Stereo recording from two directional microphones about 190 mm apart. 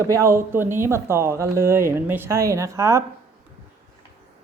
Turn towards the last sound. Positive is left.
turn(degrees=-15)  # may be behind; listen again after turning